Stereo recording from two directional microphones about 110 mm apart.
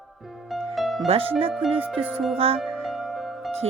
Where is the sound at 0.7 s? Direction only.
Centre (ahead or behind).